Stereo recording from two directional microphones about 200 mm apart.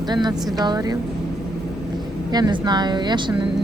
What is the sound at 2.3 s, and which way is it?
A woman's voice, 20° right (ahead or behind).